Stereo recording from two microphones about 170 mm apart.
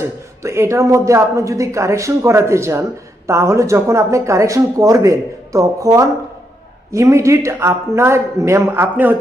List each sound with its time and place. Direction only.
0.0 s a man's voice: 15° right (ahead or behind)